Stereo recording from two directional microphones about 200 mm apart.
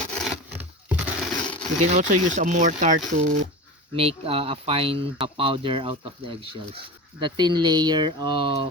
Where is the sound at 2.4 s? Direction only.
40° right (ahead or behind).